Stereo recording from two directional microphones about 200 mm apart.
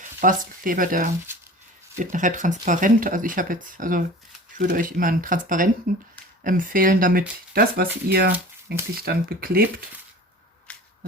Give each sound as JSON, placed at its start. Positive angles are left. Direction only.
{"t": 0.2, "sound": "speech", "side_deg": -45}
{"t": 10.7, "sound": "whip", "side_deg": 5}